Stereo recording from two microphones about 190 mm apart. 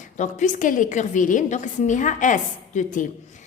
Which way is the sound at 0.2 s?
40° left (ahead or behind).